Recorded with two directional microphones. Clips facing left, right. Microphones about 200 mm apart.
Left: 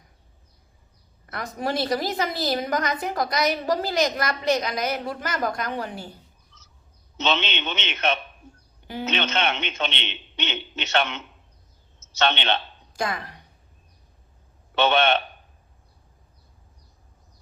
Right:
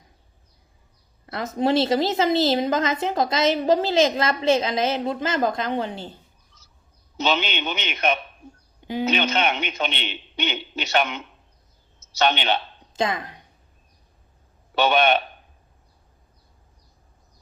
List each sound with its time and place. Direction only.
1.3 s a woman's voice: 25° right (ahead or behind)
7.2 s a man's voice: 10° right (ahead or behind)
12.2 s a man's voice: 10° right (ahead or behind)
12.9 s speech: 20° right (ahead or behind)
14.8 s a man's voice: 10° right (ahead or behind)